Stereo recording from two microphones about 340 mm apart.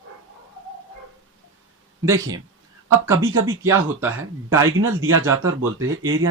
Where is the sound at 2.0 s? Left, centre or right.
Centre.